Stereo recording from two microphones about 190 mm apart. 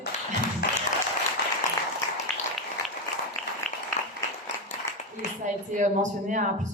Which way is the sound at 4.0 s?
35° left (ahead or behind).